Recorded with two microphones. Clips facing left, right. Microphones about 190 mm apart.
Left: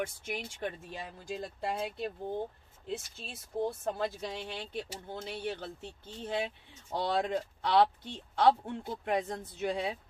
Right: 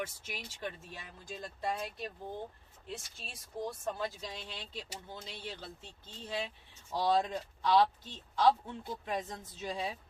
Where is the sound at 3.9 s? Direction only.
60° left (ahead or behind).